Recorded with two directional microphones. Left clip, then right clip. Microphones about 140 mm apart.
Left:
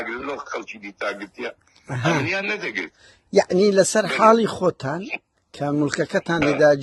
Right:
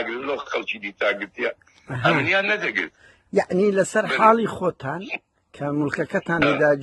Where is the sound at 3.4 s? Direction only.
40° left (ahead or behind).